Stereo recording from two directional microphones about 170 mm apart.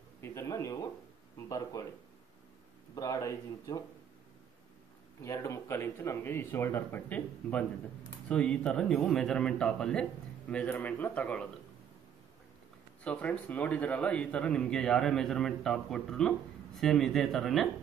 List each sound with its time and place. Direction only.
0.2 s a sound: 15° left (ahead or behind)
1.5 s speech: 20° left (ahead or behind)
3.0 s speech: 20° left (ahead or behind)
5.2 s a man's voice: 15° left (ahead or behind)
13.0 s a man's voice: 5° left (ahead or behind)